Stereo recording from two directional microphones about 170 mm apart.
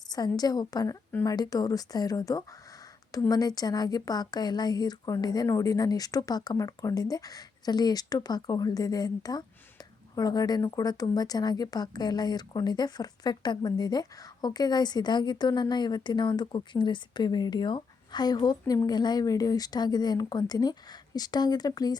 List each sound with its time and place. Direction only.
0.1 s speech: 25° left (ahead or behind)